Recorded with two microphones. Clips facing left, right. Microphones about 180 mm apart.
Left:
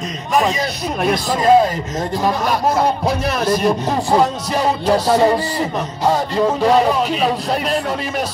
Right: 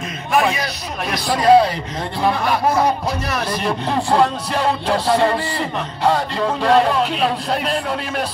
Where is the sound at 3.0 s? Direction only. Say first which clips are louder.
Left 5 dB; 45° left (ahead or behind).